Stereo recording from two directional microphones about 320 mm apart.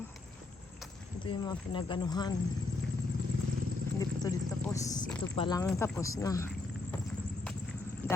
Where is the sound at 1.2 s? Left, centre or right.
Centre.